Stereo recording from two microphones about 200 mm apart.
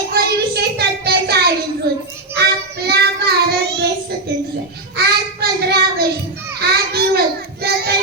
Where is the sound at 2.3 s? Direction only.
55° right (ahead or behind).